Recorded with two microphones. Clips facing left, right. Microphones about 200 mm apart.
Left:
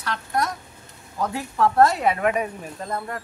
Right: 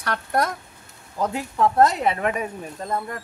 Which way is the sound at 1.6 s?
20° right (ahead or behind).